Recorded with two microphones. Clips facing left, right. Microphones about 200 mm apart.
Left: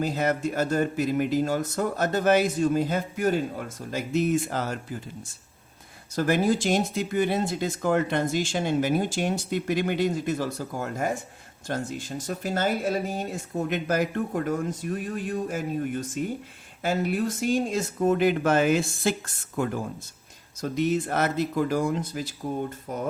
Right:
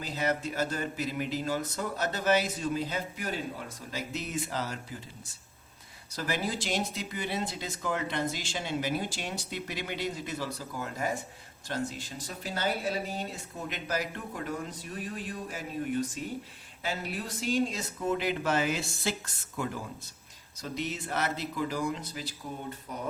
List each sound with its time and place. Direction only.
0.0 s speech: 50° left (ahead or behind)
6.1 s speech: 50° left (ahead or behind)